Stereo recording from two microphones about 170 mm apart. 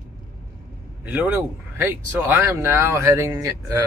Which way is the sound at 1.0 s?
10° right (ahead or behind).